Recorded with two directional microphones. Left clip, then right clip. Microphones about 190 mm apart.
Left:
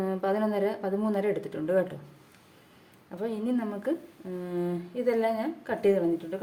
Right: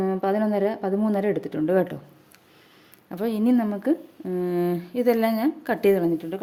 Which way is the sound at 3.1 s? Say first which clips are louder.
Right 7 dB; 60° right (ahead or behind).